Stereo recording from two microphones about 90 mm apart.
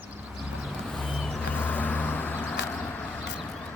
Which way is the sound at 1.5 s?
20° left (ahead or behind).